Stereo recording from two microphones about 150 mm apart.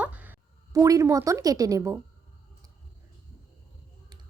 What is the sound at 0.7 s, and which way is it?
A woman's voice, 20° right (ahead or behind).